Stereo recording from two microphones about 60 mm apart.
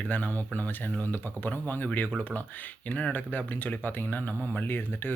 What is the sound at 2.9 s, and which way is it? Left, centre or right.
Speech, left.